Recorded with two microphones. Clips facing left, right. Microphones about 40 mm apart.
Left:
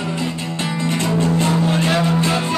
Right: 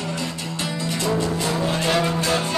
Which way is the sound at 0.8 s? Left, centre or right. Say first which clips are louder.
Left 4 dB; left.